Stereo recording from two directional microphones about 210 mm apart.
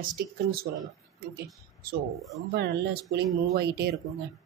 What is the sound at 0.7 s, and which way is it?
Speech, 55° right (ahead or behind).